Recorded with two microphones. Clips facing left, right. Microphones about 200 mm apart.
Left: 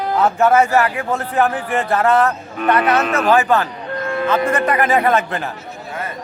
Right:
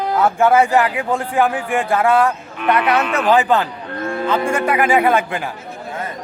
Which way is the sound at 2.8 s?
45° left (ahead or behind).